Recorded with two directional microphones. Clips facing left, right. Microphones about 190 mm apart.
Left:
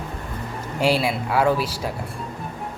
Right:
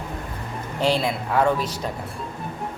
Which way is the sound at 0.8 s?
10° left (ahead or behind).